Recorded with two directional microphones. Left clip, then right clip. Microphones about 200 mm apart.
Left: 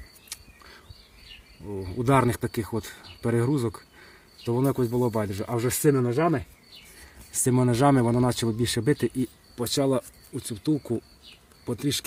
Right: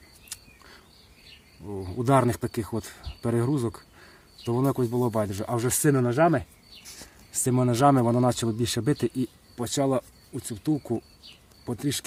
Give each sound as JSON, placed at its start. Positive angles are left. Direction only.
{"t": 1.6, "sound": "speech", "side_deg": 0}
{"t": 7.3, "sound": "speech", "side_deg": 0}